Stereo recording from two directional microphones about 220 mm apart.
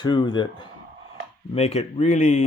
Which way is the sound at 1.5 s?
30° left (ahead or behind).